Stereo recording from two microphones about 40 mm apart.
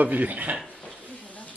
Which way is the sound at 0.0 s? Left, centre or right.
Right.